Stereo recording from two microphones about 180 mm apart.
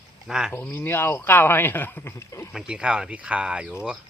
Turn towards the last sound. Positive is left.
turn(degrees=-5)  # may be behind; listen again after turning